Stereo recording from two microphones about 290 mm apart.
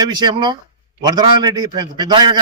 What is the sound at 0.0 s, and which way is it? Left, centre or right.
A man's voice, centre.